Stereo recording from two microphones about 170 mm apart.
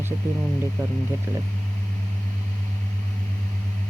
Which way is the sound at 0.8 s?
15° right (ahead or behind).